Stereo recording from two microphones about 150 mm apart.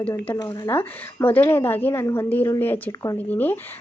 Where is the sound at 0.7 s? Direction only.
15° left (ahead or behind).